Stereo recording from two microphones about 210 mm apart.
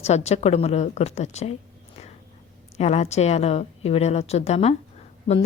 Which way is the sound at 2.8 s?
30° left (ahead or behind).